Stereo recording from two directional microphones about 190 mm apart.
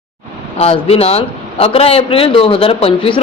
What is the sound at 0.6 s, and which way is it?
A man's voice, 30° left (ahead or behind).